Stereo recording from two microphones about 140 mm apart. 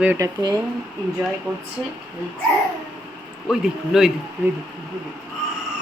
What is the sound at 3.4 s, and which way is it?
Speech, 5° right (ahead or behind).